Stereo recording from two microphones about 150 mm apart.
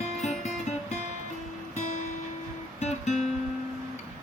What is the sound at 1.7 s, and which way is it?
Music, 55° left (ahead or behind).